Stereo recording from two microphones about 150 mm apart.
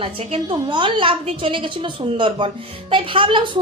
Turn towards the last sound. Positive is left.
turn(degrees=-35)  # may be behind; listen again after turning